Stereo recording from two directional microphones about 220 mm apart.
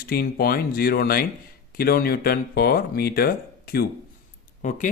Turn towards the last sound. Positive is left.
turn(degrees=35)  # may be behind; listen again after turning